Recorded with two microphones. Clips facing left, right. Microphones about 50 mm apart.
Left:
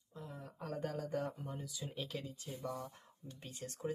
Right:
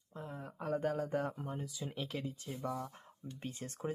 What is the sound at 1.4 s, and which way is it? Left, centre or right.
Speech, right.